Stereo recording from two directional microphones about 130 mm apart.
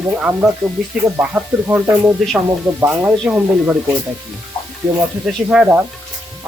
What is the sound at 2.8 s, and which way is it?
Speech, 20° right (ahead or behind).